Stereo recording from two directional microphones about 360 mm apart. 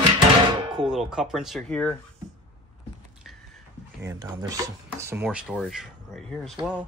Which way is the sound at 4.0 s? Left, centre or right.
Centre.